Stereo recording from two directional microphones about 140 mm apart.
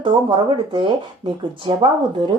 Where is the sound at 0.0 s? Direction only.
35° right (ahead or behind).